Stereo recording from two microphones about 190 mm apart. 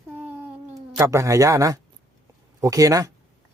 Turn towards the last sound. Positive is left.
turn(degrees=-20)  # may be behind; listen again after turning